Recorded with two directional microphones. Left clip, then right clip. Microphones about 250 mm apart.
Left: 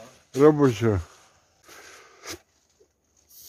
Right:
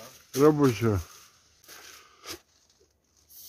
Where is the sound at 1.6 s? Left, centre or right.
Centre.